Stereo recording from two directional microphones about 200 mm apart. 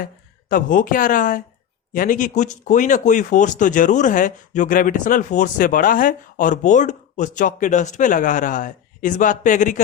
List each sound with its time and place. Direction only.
0.0 s speech: 45° left (ahead or behind)